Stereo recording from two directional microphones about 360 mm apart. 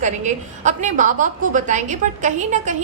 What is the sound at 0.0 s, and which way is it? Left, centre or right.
A woman's voice, centre.